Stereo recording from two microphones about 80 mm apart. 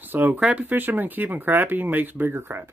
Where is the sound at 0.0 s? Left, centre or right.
Right.